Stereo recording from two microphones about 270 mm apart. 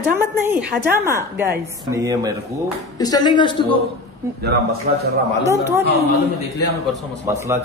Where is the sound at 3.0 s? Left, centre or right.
Centre.